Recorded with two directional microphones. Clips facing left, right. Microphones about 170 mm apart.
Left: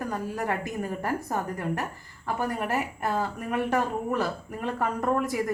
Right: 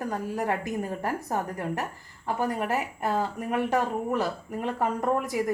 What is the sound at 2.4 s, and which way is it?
Speech, 20° right (ahead or behind).